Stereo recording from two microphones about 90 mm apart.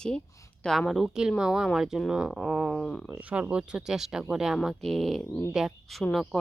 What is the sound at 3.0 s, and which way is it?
A woman's voice, 10° right (ahead or behind).